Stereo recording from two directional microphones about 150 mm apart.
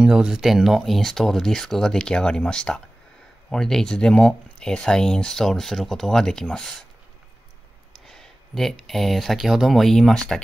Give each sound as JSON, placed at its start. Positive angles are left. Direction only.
{"t": 0.0, "sound": "speech", "side_deg": -5}
{"t": 8.1, "sound": "speech", "side_deg": 0}